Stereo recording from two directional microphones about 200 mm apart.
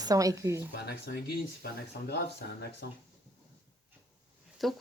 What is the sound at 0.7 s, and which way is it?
Speech, 55° left (ahead or behind).